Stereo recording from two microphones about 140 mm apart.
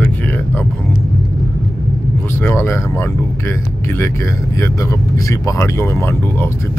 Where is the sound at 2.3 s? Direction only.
15° left (ahead or behind).